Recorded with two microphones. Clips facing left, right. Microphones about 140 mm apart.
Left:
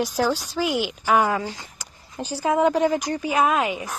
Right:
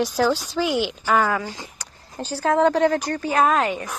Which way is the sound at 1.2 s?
20° left (ahead or behind).